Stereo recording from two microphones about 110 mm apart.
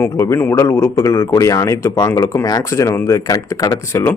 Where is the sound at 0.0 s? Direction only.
20° left (ahead or behind).